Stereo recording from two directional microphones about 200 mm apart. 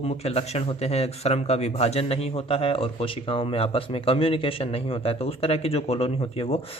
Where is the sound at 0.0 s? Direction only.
30° left (ahead or behind).